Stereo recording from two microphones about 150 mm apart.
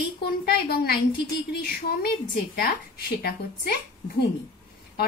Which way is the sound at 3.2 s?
90° left.